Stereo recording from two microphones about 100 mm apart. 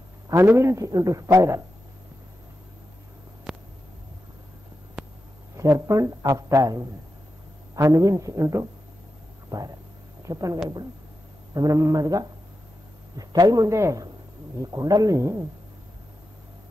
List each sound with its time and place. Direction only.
0.3 s a man's voice: 25° right (ahead or behind)
3.5 s a sound: 5° right (ahead or behind)
5.6 s a man's voice: 30° right (ahead or behind)